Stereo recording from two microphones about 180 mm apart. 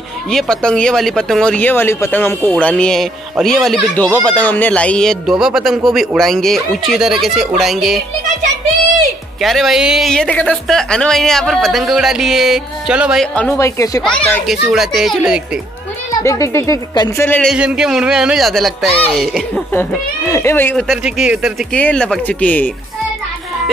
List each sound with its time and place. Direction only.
0.3 s a woman's voice: 5° left (ahead or behind)
9.4 s a woman's voice: centre (ahead or behind)
16.2 s speech: 15° left (ahead or behind)
17.3 s a woman's voice: 5° left (ahead or behind)
19.7 s a woman's voice: 15° left (ahead or behind)